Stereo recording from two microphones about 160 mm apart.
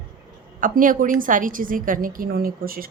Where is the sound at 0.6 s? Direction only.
55° right (ahead or behind).